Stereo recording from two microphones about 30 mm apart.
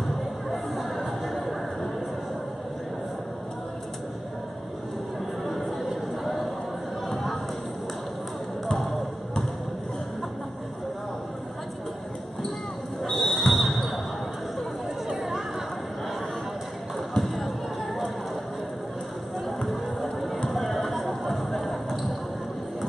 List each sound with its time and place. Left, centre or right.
0.5 s chatter: centre
5.4 s chatter: centre
6.2 s a sound: centre
13.2 s basketball bounce: centre
15.0 s chatter: centre
17.1 s basketball bounce: centre
19.4 s music: centre
20.5 s a sound: centre